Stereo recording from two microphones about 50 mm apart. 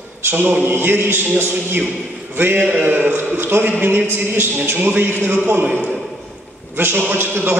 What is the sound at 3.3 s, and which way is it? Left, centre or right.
A man's voice, right.